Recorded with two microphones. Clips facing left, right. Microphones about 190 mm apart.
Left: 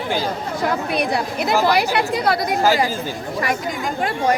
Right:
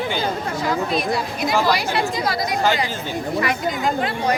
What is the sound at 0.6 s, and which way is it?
A woman's voice, 60° left (ahead or behind).